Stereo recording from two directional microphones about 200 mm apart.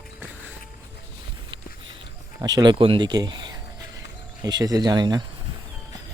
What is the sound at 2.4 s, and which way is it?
Speech, 20° right (ahead or behind).